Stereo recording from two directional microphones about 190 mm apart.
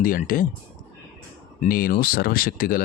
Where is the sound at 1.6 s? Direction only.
50° left (ahead or behind).